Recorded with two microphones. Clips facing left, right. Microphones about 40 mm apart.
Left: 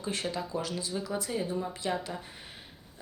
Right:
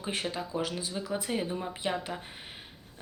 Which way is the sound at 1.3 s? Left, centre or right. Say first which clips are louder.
Even; right.